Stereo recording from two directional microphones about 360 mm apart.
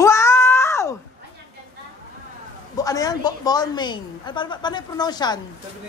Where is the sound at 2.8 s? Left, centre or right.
Centre.